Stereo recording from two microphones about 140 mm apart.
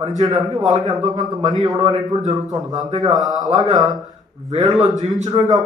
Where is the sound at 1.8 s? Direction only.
30° right (ahead or behind).